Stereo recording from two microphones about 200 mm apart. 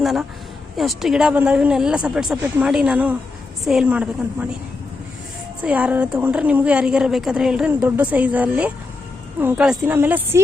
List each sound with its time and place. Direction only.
0.0 s a woman's voice: centre (ahead or behind)
5.6 s a woman's voice: 5° right (ahead or behind)